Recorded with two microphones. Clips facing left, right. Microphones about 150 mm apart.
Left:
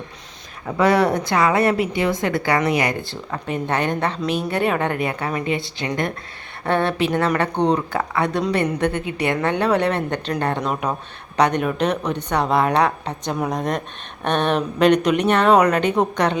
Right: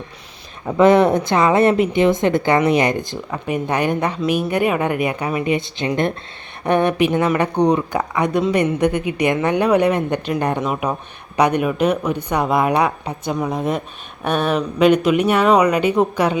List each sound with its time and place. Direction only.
0.8 s a woman's voice: 20° right (ahead or behind)
13.3 s a woman's voice: centre (ahead or behind)